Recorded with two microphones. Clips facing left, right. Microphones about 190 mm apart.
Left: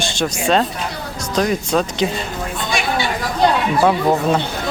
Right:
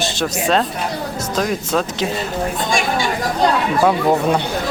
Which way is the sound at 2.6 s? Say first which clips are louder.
Left 1 dB; 45° right (ahead or behind).